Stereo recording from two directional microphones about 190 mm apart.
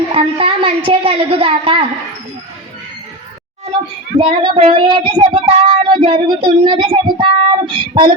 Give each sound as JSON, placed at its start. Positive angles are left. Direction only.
{"t": 0.1, "sound": "child singing", "side_deg": -30}
{"t": 4.2, "sound": "child singing", "side_deg": -25}